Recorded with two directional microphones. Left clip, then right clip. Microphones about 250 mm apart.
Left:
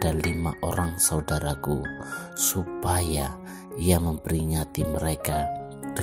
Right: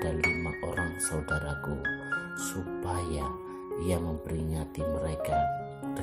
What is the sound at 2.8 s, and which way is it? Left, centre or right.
Speech, left.